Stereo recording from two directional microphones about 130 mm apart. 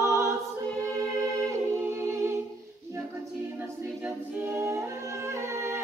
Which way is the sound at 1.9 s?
20° right (ahead or behind).